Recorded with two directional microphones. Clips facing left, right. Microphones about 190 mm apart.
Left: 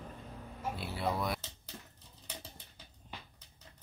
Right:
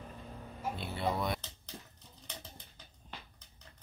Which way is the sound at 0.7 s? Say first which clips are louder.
Right 1 dB; 5° left (ahead or behind).